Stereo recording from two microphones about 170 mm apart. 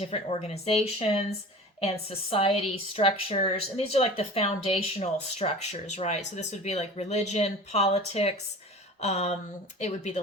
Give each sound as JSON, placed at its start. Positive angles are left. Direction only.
{"t": 0.0, "sound": "a woman's voice", "side_deg": 35}